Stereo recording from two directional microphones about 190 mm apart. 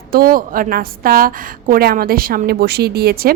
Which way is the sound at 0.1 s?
50° right (ahead or behind).